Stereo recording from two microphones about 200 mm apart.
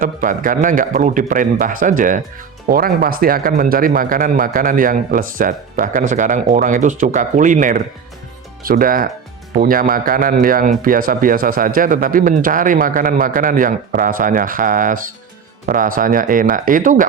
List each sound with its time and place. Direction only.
0.0 s a man's voice: 45° right (ahead or behind)